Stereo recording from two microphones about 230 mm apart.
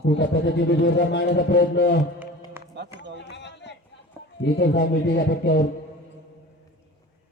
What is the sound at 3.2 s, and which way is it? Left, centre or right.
Run, left.